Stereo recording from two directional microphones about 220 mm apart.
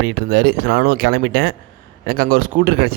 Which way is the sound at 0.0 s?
50° right (ahead or behind).